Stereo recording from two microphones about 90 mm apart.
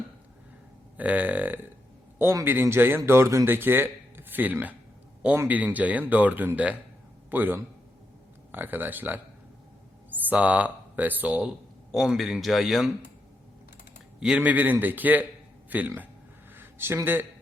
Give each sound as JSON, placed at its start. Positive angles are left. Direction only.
{"t": 0.9, "sound": "a man's voice", "side_deg": -20}
{"t": 11.9, "sound": "speech", "side_deg": 0}
{"t": 14.2, "sound": "speech", "side_deg": -15}